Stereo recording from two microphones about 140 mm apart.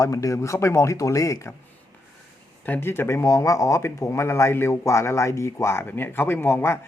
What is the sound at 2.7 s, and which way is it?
Speech, 15° left (ahead or behind).